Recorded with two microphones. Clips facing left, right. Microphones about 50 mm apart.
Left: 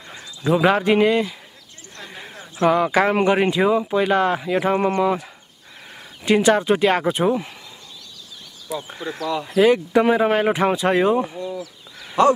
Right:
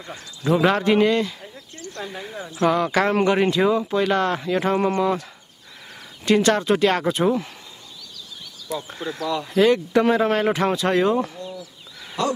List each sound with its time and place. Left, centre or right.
0.1 s speech: centre
6.2 s speech: centre
8.6 s speech: centre
12.2 s speech: left